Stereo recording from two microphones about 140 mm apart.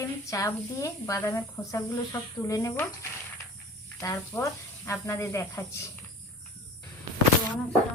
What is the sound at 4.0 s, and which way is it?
A woman's voice, 25° left (ahead or behind).